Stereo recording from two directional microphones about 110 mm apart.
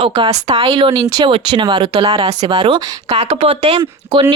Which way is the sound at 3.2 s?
80° right.